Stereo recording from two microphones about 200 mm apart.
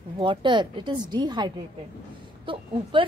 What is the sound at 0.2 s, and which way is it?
A woman's voice, 25° right (ahead or behind).